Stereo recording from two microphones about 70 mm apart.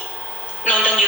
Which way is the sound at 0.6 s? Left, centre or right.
Centre.